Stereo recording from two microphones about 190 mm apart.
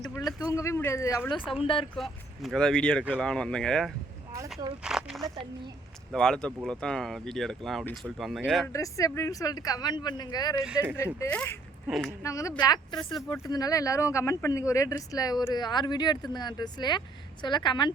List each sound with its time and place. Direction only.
0.0 s speech: centre (ahead or behind)
0.5 s speech: 15° left (ahead or behind)
1.4 s speech: 5° right (ahead or behind)
1.6 s speech: 30° left (ahead or behind)
2.0 s speech: centre (ahead or behind)
8.7 s speech: 15° left (ahead or behind)
11.9 s speech: centre (ahead or behind)
12.2 s speech: 15° left (ahead or behind)